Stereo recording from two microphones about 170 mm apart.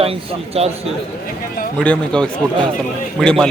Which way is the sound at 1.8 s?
5° left (ahead or behind).